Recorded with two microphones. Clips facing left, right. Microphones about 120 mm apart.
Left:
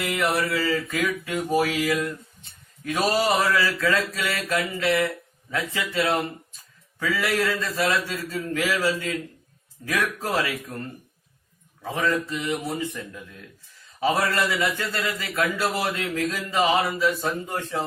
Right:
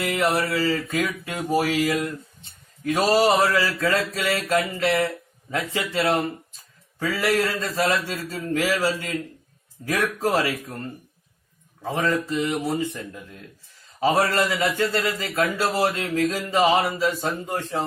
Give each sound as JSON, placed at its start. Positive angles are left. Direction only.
{"t": 0.0, "sound": "a man's voice", "side_deg": -35}
{"t": 11.8, "sound": "a man's voice", "side_deg": -30}